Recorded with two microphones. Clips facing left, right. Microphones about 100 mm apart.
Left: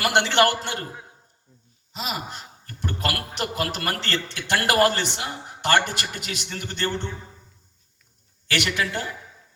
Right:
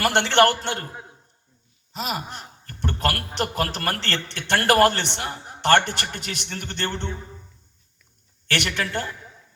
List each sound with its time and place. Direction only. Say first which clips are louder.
0.2 s a man's voice: right 1 dB; 55° right (ahead or behind)
2.0 s a man's voice: right 2 dB; 55° right (ahead or behind)
8.5 s a man's voice: even; 55° right (ahead or behind)